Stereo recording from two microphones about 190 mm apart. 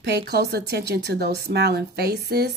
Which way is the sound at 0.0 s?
60° right (ahead or behind).